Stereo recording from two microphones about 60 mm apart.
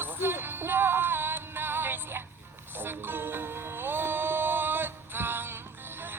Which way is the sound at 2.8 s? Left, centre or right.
Right.